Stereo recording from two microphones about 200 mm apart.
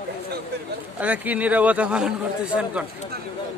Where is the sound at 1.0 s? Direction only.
5° right (ahead or behind).